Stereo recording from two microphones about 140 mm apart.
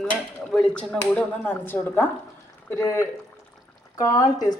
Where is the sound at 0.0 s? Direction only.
5° left (ahead or behind).